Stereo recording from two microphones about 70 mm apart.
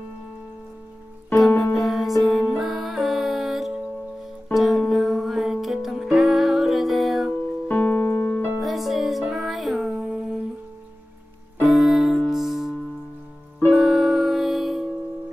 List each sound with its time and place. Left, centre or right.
1.6 s music: centre
7.6 s piano: left
8.5 s music: centre
10.0 s humming: centre
11.6 s music: centre